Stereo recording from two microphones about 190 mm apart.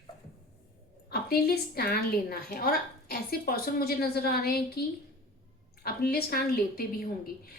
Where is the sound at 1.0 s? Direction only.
55° left (ahead or behind).